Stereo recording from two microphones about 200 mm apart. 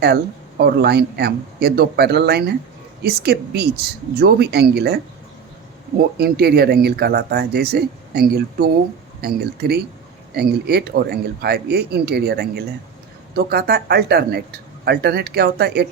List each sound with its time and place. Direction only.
0.0 s speech: 55° right (ahead or behind)
6.1 s speech: 50° right (ahead or behind)